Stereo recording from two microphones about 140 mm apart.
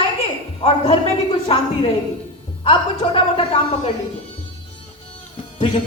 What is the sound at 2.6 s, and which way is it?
A woman's voice, 40° left (ahead or behind).